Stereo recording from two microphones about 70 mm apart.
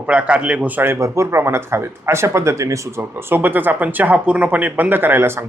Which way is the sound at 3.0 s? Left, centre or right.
Right.